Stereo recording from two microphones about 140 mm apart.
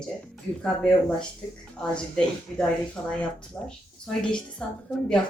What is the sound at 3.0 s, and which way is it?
Speech, 25° left (ahead or behind).